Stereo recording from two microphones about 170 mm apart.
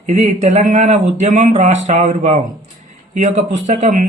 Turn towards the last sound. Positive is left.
turn(degrees=-45)  # may be behind; listen again after turning